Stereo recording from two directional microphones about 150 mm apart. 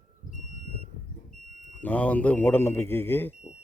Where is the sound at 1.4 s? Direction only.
55° right (ahead or behind).